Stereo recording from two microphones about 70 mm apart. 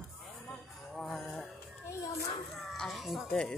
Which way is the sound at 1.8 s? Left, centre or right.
Left.